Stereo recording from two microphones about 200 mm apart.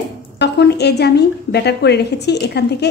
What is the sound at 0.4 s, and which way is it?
A woman's voice, 55° left (ahead or behind).